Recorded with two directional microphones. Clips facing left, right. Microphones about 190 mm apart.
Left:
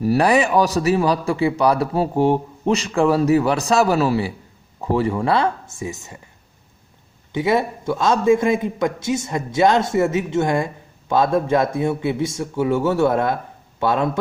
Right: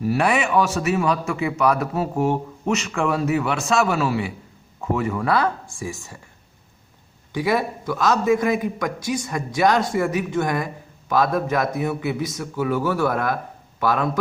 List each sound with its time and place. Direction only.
0.0 s a man's voice: 40° left (ahead or behind); by 6.1 s 20° left (ahead or behind)
7.3 s a man's voice: 25° left (ahead or behind)